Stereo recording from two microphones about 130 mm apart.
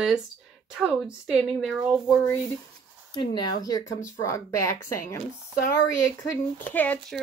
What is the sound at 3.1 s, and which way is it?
Speech, 35° left (ahead or behind).